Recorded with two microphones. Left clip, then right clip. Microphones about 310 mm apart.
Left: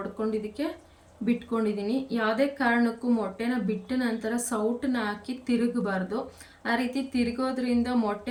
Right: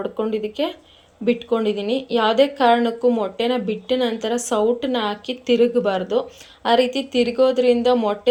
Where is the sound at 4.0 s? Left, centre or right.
Centre.